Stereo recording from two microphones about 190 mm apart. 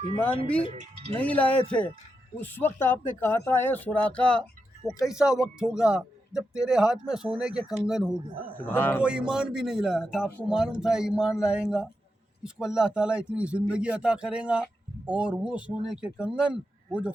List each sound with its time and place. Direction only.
0.8 s speech: 30° right (ahead or behind)
1.2 s speech: 5° left (ahead or behind)
8.5 s speech: 10° left (ahead or behind)
9.0 s speech: 5° right (ahead or behind)